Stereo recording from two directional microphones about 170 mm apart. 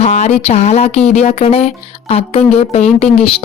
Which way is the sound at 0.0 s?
40° left (ahead or behind).